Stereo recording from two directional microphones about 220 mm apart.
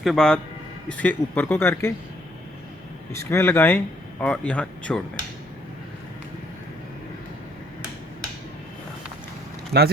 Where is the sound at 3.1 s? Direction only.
10° left (ahead or behind).